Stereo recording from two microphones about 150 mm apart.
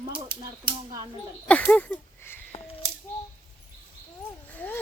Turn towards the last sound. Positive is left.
turn(degrees=10)  # may be behind; listen again after turning